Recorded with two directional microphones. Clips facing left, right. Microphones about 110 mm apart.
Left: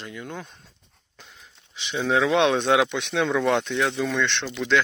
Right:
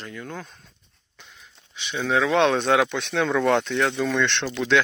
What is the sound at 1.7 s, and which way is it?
Speech, 25° left (ahead or behind).